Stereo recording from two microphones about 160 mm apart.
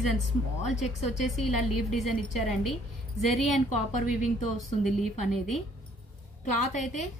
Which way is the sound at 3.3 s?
45° left (ahead or behind).